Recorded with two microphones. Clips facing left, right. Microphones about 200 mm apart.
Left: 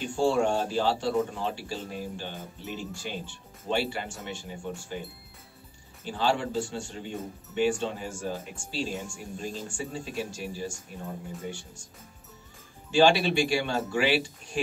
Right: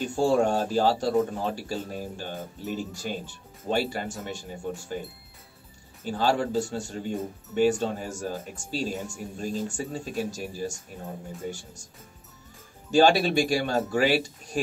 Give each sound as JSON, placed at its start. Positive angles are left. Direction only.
{"t": 0.0, "sound": "speech", "side_deg": -40}
{"t": 6.0, "sound": "speech", "side_deg": -40}
{"t": 12.9, "sound": "speech", "side_deg": -40}